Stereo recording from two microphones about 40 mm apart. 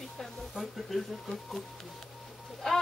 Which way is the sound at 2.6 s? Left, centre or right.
Centre.